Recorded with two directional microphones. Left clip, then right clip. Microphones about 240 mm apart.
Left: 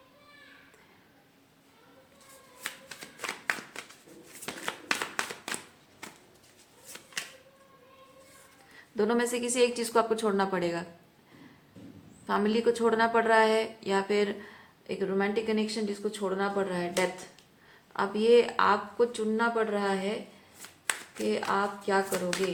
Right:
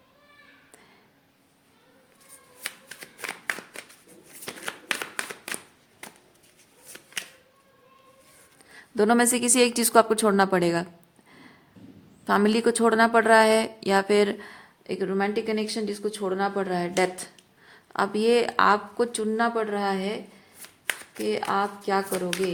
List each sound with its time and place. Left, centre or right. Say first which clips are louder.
2.6 s shuffling cards: right 3 dB; centre
4.4 s a sound: right 1 dB; centre
9.0 s a woman's voice: right 6 dB; right
12.2 s a woman's voice: right 5 dB; right
21.2 s speech: right 3 dB; right